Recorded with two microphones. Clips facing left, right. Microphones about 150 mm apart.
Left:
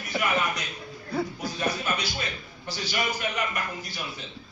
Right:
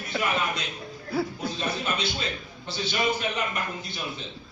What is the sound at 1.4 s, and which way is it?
A man's voice, 25° right (ahead or behind).